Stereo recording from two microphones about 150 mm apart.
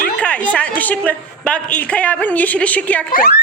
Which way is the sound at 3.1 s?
85° left.